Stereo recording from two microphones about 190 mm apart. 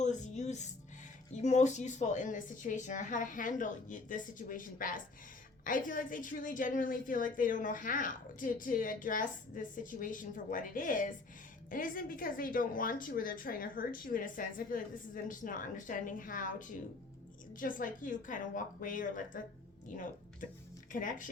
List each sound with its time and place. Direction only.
0.0 s music: 40° left (ahead or behind)
1.3 s a woman's voice: 35° left (ahead or behind)
20.9 s a woman's voice: 45° left (ahead or behind)